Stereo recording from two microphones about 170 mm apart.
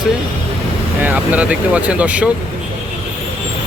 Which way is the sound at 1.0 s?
10° right (ahead or behind).